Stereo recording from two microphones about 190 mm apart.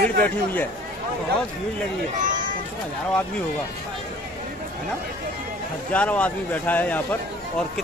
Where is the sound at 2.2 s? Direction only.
45° right (ahead or behind).